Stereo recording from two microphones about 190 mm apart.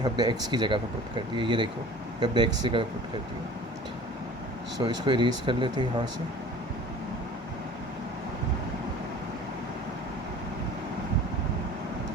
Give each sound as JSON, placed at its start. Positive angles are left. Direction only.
{"t": 0.0, "sound": "speech", "side_deg": -20}
{"t": 4.8, "sound": "speech", "side_deg": -25}